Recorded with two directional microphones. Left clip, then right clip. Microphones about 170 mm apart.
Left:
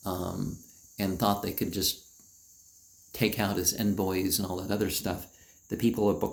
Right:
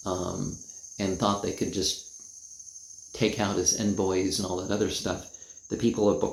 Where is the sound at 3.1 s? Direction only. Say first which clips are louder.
Right 2 dB; 40° left (ahead or behind).